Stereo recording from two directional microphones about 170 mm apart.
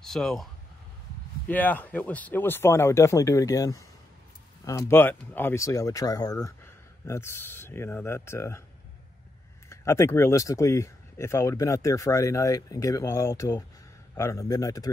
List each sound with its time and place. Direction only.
0.0 s speech: centre (ahead or behind)
1.5 s speech: 10° left (ahead or behind)
9.7 s a man's voice: 15° left (ahead or behind)